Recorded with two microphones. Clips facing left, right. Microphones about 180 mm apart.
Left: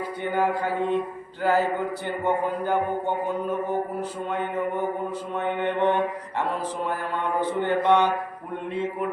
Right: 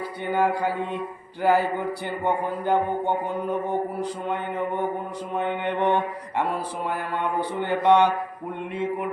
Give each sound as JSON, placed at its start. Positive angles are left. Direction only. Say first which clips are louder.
{"t": 0.3, "sound": "mantra", "louder": "right 1 dB", "side_deg": -15}
{"t": 5.5, "sound": "mantra", "louder": "left 2 dB", "side_deg": -15}